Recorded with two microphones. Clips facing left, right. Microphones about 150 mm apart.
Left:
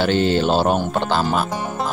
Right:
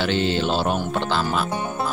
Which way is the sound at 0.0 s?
45° left (ahead or behind).